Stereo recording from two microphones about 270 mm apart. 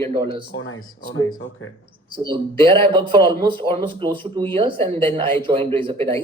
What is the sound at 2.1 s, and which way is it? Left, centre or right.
A man's voice, centre.